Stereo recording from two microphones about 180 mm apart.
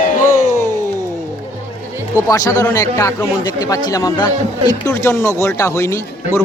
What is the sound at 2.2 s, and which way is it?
A man's voice, 20° left (ahead or behind).